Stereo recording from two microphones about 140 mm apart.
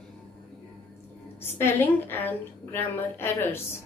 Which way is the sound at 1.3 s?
15° left (ahead or behind).